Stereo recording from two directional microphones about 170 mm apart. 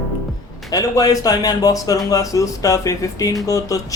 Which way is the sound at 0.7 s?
20° left (ahead or behind).